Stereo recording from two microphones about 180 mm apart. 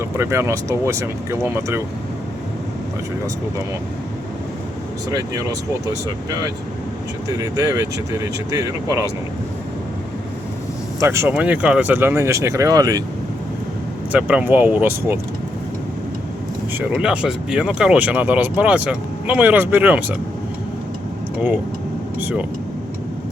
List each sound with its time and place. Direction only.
0.2 s speech: 15° right (ahead or behind)
5.1 s speech: 20° right (ahead or behind)
7.4 s speech: 20° right (ahead or behind)
11.0 s speech: 15° right (ahead or behind)
14.1 s speech: 5° right (ahead or behind)
16.7 s speech: 5° right (ahead or behind)
22.2 s speech: 10° right (ahead or behind)